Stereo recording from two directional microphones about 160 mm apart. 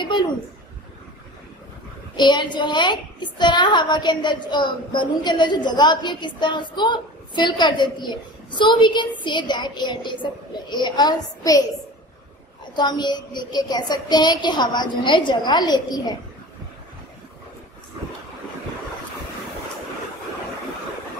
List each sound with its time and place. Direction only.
0.0 s a sound: 30° left (ahead or behind)
2.1 s a woman's voice: 30° left (ahead or behind)
12.7 s a woman's voice: 25° left (ahead or behind)